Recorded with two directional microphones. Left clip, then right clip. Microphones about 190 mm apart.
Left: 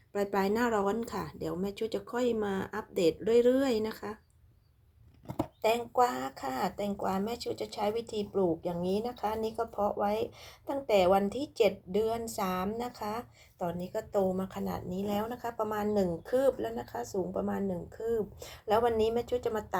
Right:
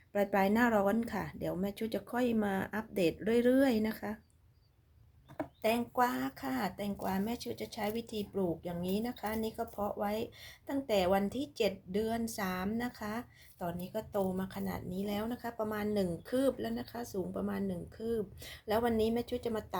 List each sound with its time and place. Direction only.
0.1 s a woman's voice: 20° right (ahead or behind)
5.6 s a woman's voice: 15° right (ahead or behind)